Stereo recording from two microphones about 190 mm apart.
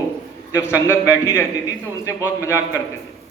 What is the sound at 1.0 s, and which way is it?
Speech, 15° left (ahead or behind).